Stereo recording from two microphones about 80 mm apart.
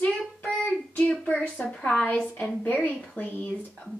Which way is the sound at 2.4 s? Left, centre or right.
Centre.